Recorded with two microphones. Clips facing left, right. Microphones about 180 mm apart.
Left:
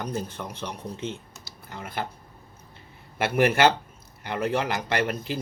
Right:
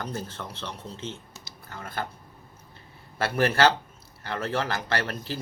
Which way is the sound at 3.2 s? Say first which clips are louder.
Left 2 dB; 15° left (ahead or behind).